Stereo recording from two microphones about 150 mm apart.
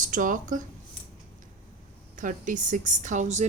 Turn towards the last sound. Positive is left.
turn(degrees=-55)  # may be behind; listen again after turning